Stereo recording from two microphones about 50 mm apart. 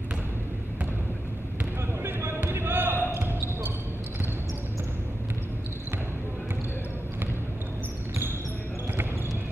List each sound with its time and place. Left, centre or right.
2.1 s basketball bounce: right